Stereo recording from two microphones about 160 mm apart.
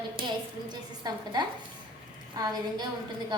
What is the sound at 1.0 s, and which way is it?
A woman's voice, 25° right (ahead or behind).